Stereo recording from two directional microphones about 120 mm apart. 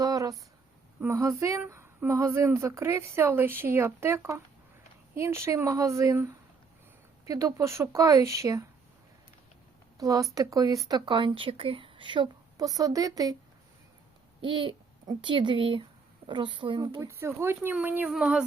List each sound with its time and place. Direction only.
0.0 s a sound: 30° right (ahead or behind)
1.0 s speech: 25° right (ahead or behind)
10.0 s speech: 30° right (ahead or behind)
14.4 s speech: 45° right (ahead or behind)
17.1 s speech: 20° right (ahead or behind)
17.8 s a sound: 15° right (ahead or behind)
18.1 s speech: 5° right (ahead or behind)